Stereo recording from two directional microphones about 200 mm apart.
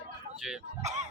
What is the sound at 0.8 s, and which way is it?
Speech, 35° right (ahead or behind).